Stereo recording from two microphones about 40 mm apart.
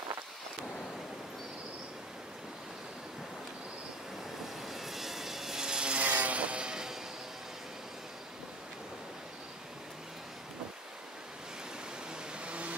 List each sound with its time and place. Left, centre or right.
4.6 s vehicle: centre
5.9 s vehicle: right; by 7.0 s centre
12.4 s vehicle: right